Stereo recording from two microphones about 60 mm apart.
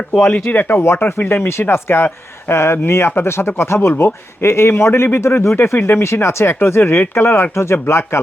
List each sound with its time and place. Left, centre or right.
0.4 s speech: left